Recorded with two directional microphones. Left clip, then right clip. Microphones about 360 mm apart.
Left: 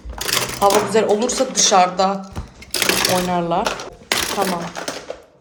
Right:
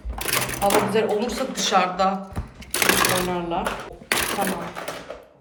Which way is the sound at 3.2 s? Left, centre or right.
Centre.